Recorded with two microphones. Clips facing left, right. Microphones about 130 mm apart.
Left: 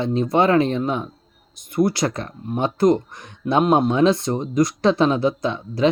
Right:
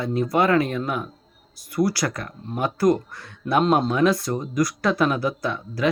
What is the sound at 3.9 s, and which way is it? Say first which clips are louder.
Speech: left 3 dB; 25° left (ahead or behind).